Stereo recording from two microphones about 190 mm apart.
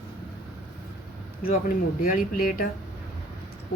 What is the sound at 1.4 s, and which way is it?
Speech, 50° left (ahead or behind).